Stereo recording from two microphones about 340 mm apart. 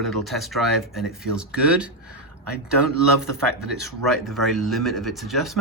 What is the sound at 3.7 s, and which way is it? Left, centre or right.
Speech, centre.